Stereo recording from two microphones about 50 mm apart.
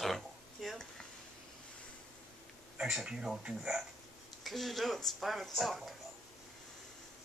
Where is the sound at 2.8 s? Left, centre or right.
Centre.